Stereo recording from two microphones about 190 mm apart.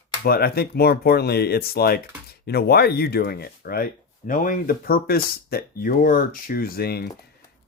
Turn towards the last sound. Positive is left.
turn(degrees=55)  # may be behind; listen again after turning